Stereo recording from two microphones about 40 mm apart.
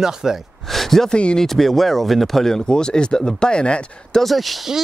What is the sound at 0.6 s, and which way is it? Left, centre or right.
Speech, centre.